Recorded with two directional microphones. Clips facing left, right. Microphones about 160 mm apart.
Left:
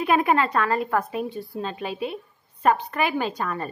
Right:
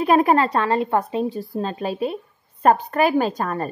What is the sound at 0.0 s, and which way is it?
A woman's voice, 35° right (ahead or behind).